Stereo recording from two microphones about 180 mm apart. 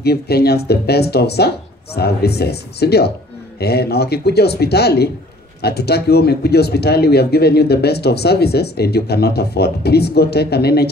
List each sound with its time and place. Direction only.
0.0 s speech: 60° left (ahead or behind)